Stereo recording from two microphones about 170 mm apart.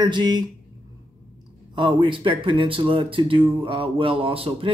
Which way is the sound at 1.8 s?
30° right (ahead or behind).